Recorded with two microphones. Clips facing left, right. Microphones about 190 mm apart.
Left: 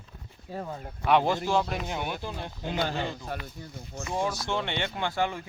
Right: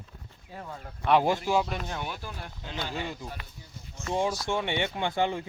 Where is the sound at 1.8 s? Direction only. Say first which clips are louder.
Left 3 dB; 15° left (ahead or behind).